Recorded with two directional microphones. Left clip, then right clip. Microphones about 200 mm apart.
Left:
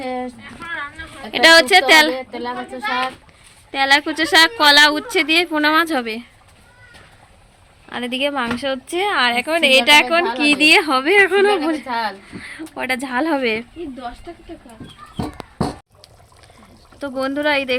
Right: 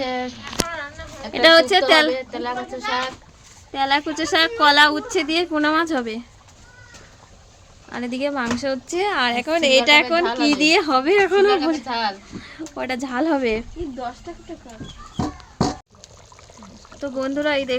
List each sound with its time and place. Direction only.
0.0 s a sound: 20° left (ahead or behind)
1.3 s a woman's voice: centre (ahead or behind)
2.3 s a child's voice: 20° left (ahead or behind)
7.9 s a woman's voice: 5° left (ahead or behind)
17.0 s a woman's voice: centre (ahead or behind)